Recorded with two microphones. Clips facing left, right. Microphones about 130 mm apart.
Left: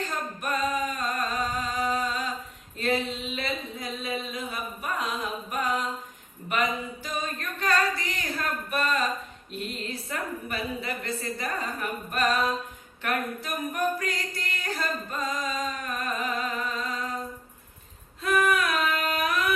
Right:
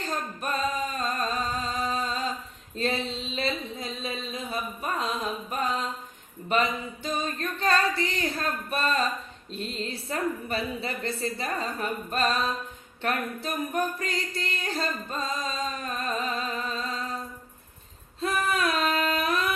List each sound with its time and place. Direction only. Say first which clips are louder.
0.0 s singing: even; 25° right (ahead or behind)
2.7 s a sound: left 1 dB; 30° right (ahead or behind)
6.5 s singing: right 2 dB; 30° right (ahead or behind)
8.7 s a sound: even; 30° right (ahead or behind)
9.5 s a woman's voice: right 1 dB; 30° right (ahead or behind)
13.0 s music: even; 30° right (ahead or behind)
18.2 s female singing: left 2 dB; 30° right (ahead or behind)
19.1 s music: even; 30° right (ahead or behind)